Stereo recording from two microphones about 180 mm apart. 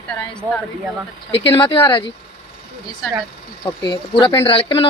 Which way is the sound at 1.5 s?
30° left (ahead or behind).